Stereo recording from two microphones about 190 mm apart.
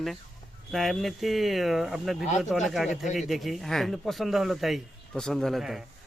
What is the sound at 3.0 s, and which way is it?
Speech, 40° left (ahead or behind).